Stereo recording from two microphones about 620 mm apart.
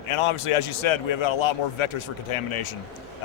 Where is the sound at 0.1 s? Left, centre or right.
Left.